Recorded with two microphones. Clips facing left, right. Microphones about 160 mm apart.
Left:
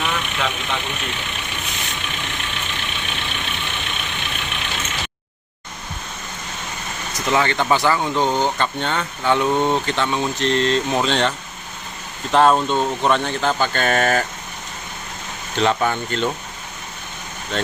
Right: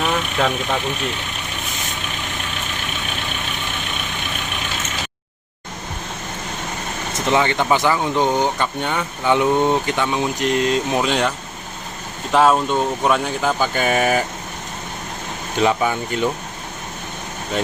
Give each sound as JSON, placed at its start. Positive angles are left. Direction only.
{"t": 0.0, "sound": "vehicle", "side_deg": -40}
{"t": 7.1, "sound": "speech", "side_deg": -20}
{"t": 15.5, "sound": "speech", "side_deg": -10}